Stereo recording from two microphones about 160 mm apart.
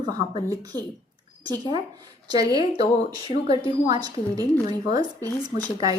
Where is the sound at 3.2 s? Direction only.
40° left (ahead or behind).